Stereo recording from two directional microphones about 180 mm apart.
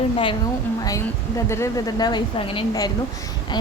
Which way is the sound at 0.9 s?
15° left (ahead or behind).